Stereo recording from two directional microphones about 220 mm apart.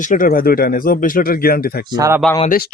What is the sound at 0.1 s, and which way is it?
A man's voice, 40° left (ahead or behind).